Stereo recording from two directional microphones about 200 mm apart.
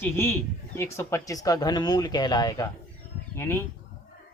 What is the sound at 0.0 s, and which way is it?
Speech, 10° left (ahead or behind).